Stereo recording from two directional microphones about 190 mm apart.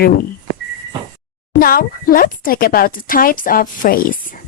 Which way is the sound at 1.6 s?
50° left (ahead or behind).